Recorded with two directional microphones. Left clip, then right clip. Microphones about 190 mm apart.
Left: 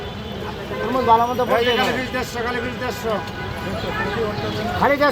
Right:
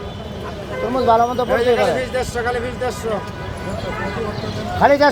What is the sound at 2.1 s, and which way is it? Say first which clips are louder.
Speech: right 3 dB; 45° left (ahead or behind).